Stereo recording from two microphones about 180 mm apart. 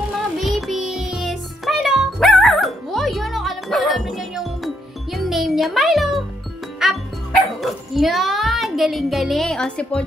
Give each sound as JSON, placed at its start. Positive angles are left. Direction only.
{"t": 0.4, "sound": "music", "side_deg": 0}